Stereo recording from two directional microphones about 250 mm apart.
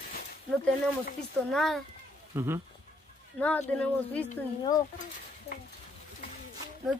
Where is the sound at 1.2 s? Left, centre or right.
Centre.